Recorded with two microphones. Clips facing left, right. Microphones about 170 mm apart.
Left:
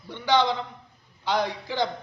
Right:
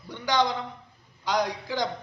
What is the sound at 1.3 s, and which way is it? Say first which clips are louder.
Speech: left 1 dB; 10° right (ahead or behind).